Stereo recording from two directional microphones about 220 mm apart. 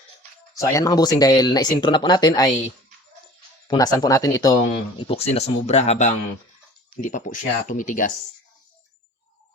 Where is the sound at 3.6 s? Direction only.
15° left (ahead or behind); by 8.1 s 35° left (ahead or behind).